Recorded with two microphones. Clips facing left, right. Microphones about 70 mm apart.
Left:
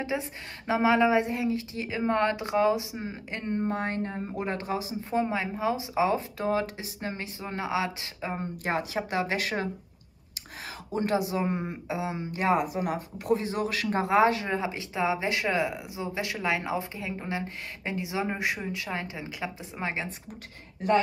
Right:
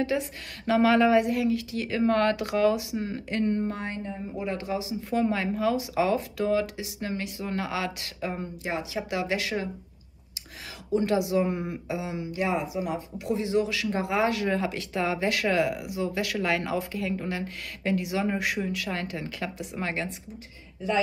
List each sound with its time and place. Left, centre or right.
0.0 s speech: left
3.7 s a woman's voice: left
5.1 s speech: left
8.6 s a woman's voice: left
10.9 s speech: left